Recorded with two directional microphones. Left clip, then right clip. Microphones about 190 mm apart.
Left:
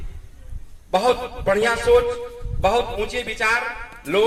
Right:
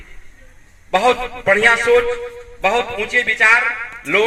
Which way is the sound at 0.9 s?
55° left (ahead or behind).